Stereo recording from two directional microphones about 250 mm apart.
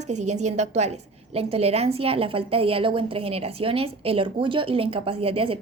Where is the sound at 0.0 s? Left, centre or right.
Right.